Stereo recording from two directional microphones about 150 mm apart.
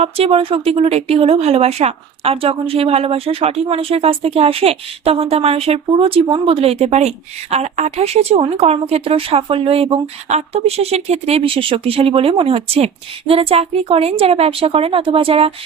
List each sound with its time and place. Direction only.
0.0 s speech: 40° right (ahead or behind)